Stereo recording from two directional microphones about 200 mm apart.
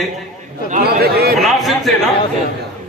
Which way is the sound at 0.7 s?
50° right (ahead or behind).